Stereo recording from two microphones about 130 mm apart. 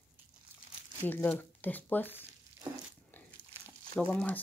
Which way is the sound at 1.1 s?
15° left (ahead or behind).